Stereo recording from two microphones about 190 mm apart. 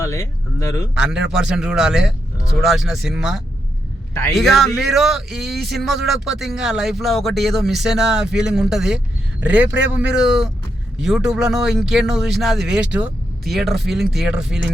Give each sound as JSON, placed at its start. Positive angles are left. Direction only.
{"t": 0.0, "sound": "speech", "side_deg": 15}
{"t": 0.9, "sound": "a man's voice", "side_deg": -5}